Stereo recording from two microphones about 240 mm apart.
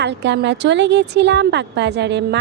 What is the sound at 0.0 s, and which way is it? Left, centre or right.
A woman's voice, right.